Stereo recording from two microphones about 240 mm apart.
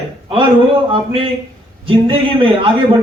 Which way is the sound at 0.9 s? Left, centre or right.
Right.